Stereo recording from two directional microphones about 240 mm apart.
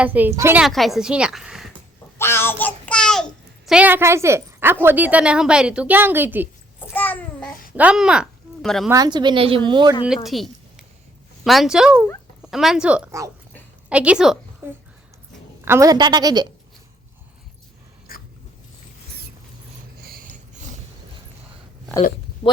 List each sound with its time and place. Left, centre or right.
0.0 s a woman's voice: centre
2.1 s a sound: centre
3.7 s a woman's voice: centre
6.9 s babbling: centre
7.8 s speech: centre
8.9 s a woman's voice: centre
10.2 s a sound: centre
11.4 s a woman's voice: centre
18.1 s dog: left
20.1 s mechanisms: right